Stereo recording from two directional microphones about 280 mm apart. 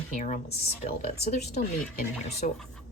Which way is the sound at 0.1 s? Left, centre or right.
Left.